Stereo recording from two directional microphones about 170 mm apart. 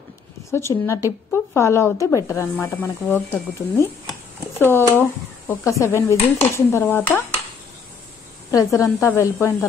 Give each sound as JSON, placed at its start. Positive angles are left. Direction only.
{"t": 0.5, "sound": "a woman's voice", "side_deg": 15}
{"t": 2.2, "sound": "dishes", "side_deg": 15}
{"t": 4.6, "sound": "dishes", "side_deg": 15}
{"t": 8.5, "sound": "dishes", "side_deg": 15}